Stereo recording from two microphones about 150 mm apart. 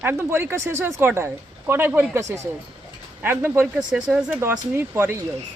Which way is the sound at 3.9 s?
5° right (ahead or behind).